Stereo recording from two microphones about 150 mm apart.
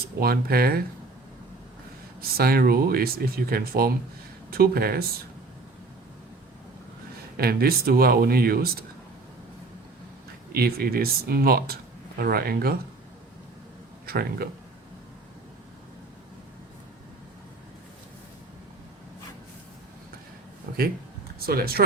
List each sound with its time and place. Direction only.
0.2 s speech: 90° right
2.4 s speech: 90° right
7.3 s speech: 90° right
10.5 s speech: 90° right
14.1 s speech: 90° right
21.4 s speech: 90° right